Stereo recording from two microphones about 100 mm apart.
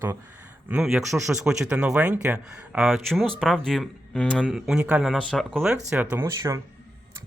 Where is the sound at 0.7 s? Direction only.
10° right (ahead or behind).